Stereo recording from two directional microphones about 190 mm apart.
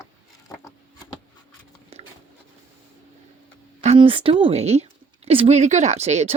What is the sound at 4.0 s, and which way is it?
Speech, 30° right (ahead or behind).